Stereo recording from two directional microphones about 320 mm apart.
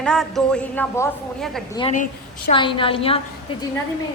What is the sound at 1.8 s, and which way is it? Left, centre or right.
A woman's voice, left.